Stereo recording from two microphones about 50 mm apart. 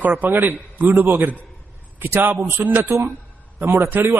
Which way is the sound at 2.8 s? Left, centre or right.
Right.